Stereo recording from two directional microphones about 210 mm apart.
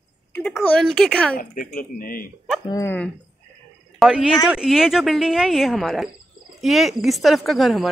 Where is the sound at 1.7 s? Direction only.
40° left (ahead or behind).